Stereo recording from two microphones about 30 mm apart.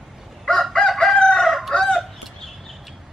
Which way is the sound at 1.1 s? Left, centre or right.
Left.